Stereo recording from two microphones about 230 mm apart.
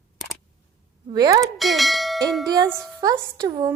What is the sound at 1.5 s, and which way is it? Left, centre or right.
Bell, centre.